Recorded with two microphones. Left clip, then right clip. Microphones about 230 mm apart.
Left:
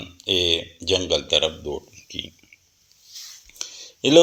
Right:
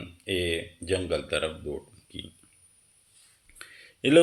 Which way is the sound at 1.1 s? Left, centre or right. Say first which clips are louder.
Left 8 dB; centre.